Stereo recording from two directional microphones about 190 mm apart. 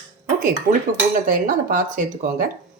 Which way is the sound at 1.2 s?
45° right (ahead or behind).